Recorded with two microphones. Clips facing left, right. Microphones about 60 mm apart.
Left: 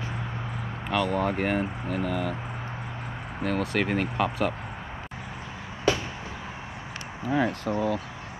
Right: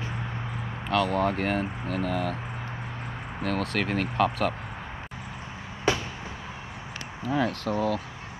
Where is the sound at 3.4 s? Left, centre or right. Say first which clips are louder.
Left 2 dB; centre.